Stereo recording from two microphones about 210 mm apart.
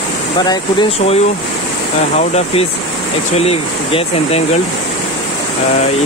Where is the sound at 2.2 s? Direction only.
30° left (ahead or behind).